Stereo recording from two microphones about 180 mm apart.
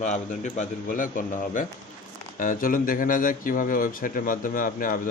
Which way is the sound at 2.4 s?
50° left (ahead or behind).